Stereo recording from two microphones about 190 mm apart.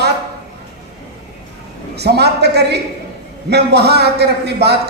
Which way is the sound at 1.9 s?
60° right (ahead or behind).